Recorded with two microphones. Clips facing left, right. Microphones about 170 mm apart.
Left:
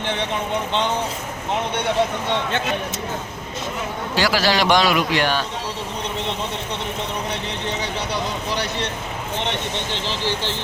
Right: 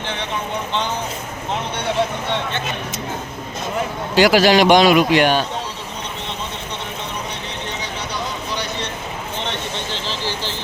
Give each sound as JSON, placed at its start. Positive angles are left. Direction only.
{"t": 4.1, "sound": "a man's voice", "side_deg": -20}